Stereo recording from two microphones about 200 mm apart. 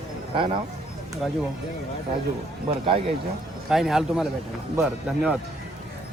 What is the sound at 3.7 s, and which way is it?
A man's voice, centre (ahead or behind).